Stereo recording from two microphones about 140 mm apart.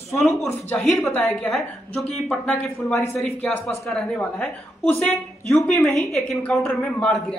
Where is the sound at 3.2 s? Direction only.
5° left (ahead or behind).